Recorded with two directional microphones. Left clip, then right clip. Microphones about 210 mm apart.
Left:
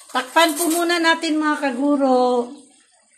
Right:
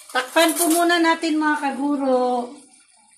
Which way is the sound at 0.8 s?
30° left (ahead or behind).